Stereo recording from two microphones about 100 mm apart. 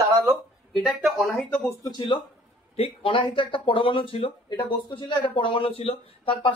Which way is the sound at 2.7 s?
70° left (ahead or behind).